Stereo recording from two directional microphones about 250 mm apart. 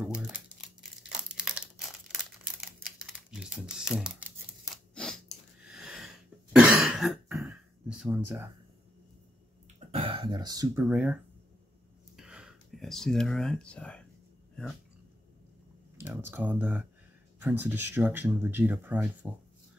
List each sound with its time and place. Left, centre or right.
0.0 s crumpling: centre
4.9 s cough: centre
9.8 s speech: right; by 11.1 s centre
12.2 s a sound: centre
16.1 s speech: centre